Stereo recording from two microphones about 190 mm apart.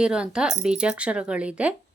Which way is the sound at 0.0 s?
5° right (ahead or behind).